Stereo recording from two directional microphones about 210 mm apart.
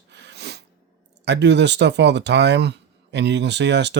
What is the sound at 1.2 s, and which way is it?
Speech, 55° right (ahead or behind).